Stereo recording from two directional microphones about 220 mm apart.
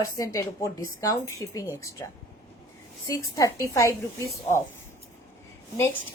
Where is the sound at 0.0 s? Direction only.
15° left (ahead or behind).